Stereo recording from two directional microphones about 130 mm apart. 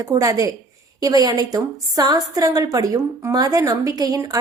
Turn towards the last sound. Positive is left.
turn(degrees=-25)  # may be behind; listen again after turning